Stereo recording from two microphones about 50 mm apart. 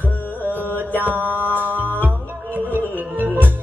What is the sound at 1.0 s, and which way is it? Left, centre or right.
Mantra, right.